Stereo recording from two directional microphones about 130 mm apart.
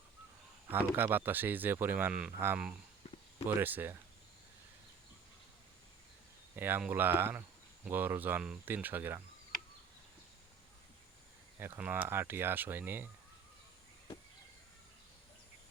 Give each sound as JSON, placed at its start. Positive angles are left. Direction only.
{"t": 0.7, "sound": "speech", "side_deg": -15}
{"t": 3.6, "sound": "speech", "side_deg": -15}
{"t": 6.6, "sound": "speech", "side_deg": -15}
{"t": 11.8, "sound": "speech", "side_deg": -10}